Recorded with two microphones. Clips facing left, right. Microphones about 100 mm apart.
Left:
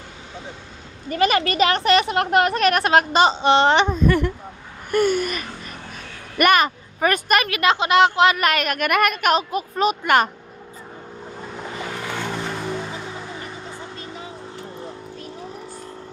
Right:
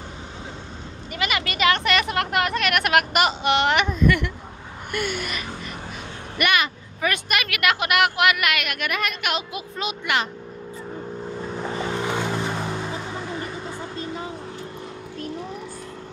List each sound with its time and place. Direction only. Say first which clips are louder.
1.0 s speech: left 8 dB; 40° left (ahead or behind)
7.4 s speech: left 4 dB; 30° left (ahead or behind); by 10.3 s 45° left (ahead or behind)
11.7 s vehicle: right 4 dB; 30° right (ahead or behind)